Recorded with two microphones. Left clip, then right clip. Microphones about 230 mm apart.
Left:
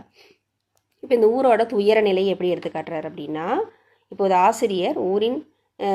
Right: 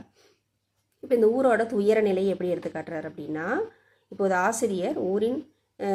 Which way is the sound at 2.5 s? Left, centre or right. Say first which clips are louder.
Left 5 dB; left.